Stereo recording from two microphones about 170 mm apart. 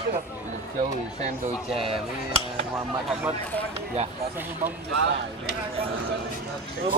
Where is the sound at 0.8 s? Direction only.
45° right (ahead or behind).